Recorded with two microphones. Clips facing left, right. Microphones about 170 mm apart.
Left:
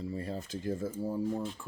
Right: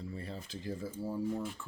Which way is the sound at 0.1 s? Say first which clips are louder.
Left 6 dB; 40° left (ahead or behind).